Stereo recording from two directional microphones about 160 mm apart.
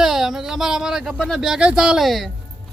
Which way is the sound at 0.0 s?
Centre (ahead or behind).